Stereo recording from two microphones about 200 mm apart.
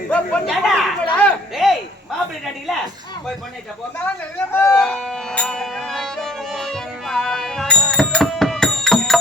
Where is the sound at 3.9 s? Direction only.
10° left (ahead or behind).